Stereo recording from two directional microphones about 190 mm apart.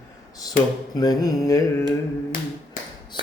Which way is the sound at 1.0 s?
20° left (ahead or behind).